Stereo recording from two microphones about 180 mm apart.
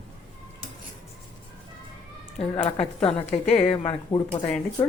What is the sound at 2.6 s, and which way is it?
A woman's voice, 35° left (ahead or behind).